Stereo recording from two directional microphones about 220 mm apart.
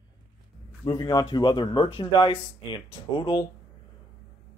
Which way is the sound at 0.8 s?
20° left (ahead or behind).